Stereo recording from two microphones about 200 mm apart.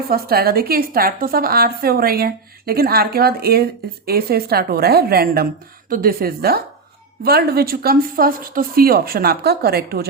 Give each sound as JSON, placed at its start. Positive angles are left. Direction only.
{"t": 0.1, "sound": "a woman's voice", "side_deg": -50}